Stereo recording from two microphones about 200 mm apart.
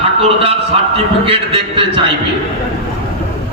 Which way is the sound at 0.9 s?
25° right (ahead or behind).